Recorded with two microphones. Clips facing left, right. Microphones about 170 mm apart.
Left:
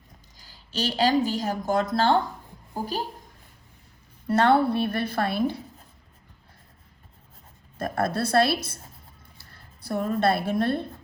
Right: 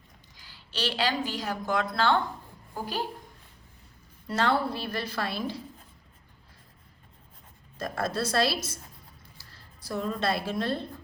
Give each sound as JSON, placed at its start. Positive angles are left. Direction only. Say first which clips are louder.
{"t": 0.3, "sound": "a woman's voice", "louder": "left 4 dB", "side_deg": 40}
{"t": 4.3, "sound": "a woman's voice", "louder": "left 7 dB", "side_deg": 60}
{"t": 7.8, "sound": "a woman's voice", "louder": "left 4 dB", "side_deg": 55}